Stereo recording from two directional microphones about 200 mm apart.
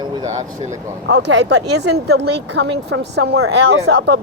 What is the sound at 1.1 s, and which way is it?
Speech, 60° right (ahead or behind).